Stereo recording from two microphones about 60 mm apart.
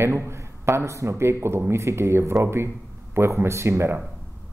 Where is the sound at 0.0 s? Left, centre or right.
Right.